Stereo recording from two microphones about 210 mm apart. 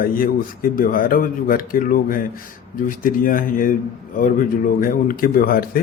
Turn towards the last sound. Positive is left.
turn(degrees=45)  # may be behind; listen again after turning